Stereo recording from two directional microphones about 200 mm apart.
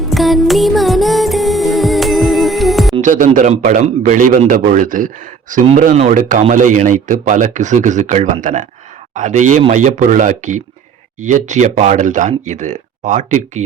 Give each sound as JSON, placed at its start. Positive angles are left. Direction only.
{"t": 0.1, "sound": "music", "side_deg": 0}
{"t": 2.9, "sound": "a man's voice", "side_deg": -40}